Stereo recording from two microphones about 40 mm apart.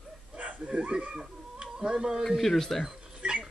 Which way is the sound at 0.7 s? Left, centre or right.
Right.